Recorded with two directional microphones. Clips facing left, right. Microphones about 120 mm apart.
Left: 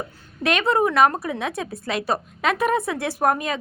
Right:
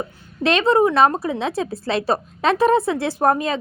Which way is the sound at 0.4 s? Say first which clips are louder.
Right 4 dB; 25° right (ahead or behind).